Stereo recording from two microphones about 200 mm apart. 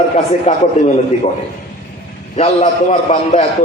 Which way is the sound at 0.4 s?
30° left (ahead or behind).